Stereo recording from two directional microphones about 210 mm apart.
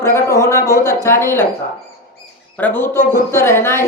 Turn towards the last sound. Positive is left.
turn(degrees=10)  # may be behind; listen again after turning